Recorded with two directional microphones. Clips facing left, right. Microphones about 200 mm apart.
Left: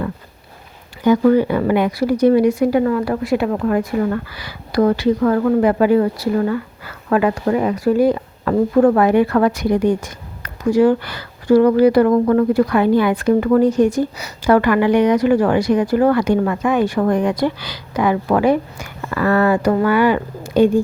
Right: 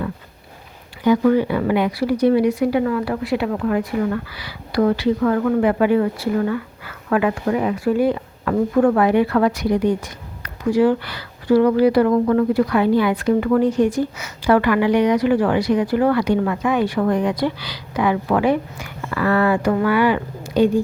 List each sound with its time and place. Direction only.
1.0 s speech: 45° left (ahead or behind)